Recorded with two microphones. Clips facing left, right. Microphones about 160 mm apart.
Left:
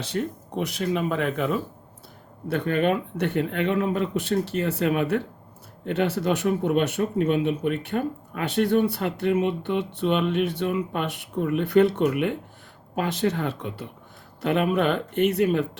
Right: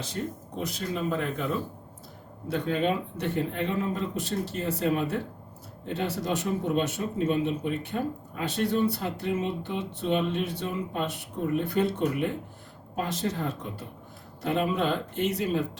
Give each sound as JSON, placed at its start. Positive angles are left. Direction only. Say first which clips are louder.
{"t": 0.0, "sound": "speech", "louder": "left 5 dB", "side_deg": 70}
{"t": 2.5, "sound": "speech", "louder": "left 4 dB", "side_deg": 60}